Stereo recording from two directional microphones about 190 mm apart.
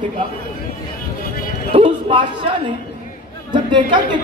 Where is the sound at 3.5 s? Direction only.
25° right (ahead or behind).